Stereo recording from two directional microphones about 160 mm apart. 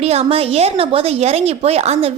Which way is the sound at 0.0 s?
40° right (ahead or behind).